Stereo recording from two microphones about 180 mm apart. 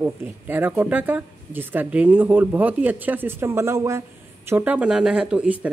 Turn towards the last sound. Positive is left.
turn(degrees=-5)  # may be behind; listen again after turning